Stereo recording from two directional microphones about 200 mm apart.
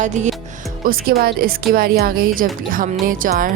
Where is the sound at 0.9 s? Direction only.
50° right (ahead or behind).